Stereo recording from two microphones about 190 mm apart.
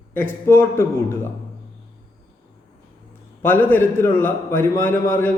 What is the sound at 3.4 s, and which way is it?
A man's voice, 10° left (ahead or behind).